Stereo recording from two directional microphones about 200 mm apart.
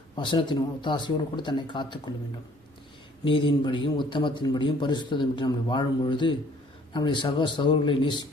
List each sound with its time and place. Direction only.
0.2 s a man's voice: 20° left (ahead or behind)
3.2 s a man's voice: 25° left (ahead or behind)